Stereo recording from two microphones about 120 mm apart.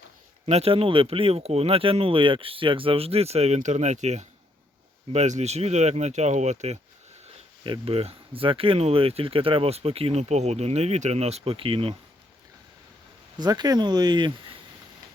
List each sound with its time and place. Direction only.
0.4 s speech: 60° right (ahead or behind)
7.6 s speech: 50° right (ahead or behind)
13.4 s speech: 35° right (ahead or behind)